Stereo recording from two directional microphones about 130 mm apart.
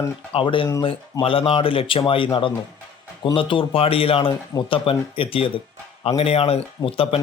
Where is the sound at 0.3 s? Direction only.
40° left (ahead or behind).